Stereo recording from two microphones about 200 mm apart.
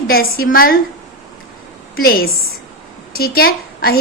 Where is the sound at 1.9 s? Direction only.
50° left (ahead or behind).